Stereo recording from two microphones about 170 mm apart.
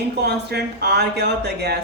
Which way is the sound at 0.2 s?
75° right (ahead or behind).